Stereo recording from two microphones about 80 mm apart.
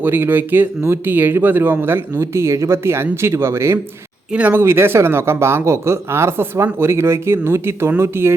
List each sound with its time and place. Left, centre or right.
0.0 s speech: right
4.3 s speech: centre
4.6 s speech: right